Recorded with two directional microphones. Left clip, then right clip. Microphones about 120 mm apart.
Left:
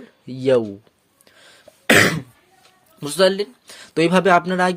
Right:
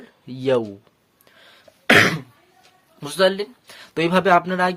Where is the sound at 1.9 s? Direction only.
90° left.